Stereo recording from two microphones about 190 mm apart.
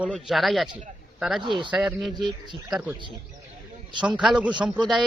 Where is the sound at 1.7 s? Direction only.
5° right (ahead or behind).